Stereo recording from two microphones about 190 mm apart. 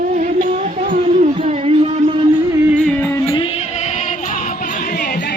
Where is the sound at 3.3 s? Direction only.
30° left (ahead or behind).